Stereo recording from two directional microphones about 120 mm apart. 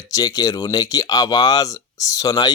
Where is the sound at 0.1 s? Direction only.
30° left (ahead or behind).